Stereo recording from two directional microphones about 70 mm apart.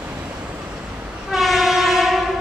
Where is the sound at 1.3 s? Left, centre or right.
Centre.